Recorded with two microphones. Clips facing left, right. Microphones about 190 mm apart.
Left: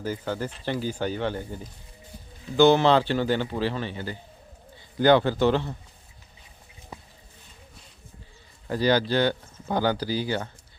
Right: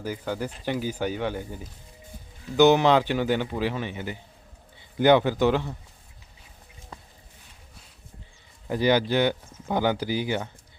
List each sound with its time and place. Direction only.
0.0 s speech: 10° right (ahead or behind)
8.6 s speech: 15° right (ahead or behind)